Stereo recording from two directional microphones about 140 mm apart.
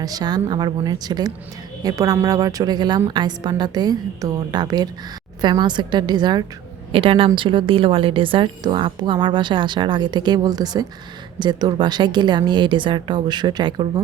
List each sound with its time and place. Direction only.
0.0 s a woman's voice: 25° right (ahead or behind)